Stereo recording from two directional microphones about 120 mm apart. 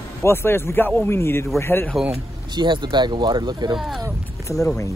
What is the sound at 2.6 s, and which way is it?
Speech, 40° right (ahead or behind).